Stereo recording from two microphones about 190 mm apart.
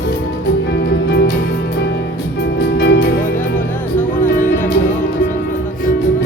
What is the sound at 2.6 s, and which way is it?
Music, 65° left (ahead or behind).